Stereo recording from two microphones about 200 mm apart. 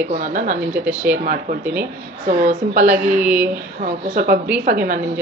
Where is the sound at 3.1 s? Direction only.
10° right (ahead or behind).